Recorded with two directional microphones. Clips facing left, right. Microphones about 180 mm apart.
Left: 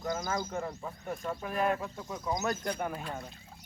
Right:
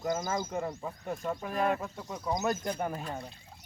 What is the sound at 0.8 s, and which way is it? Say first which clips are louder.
Speech: right 2 dB; 5° right (ahead or behind).